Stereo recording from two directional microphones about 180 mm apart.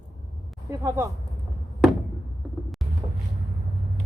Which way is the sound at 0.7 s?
15° right (ahead or behind).